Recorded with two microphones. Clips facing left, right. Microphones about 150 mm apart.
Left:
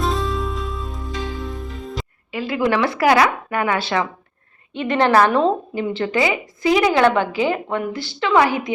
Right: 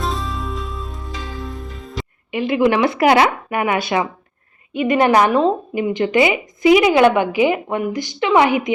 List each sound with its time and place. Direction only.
0.0 s music: centre (ahead or behind)
2.3 s a woman's voice: 20° right (ahead or behind)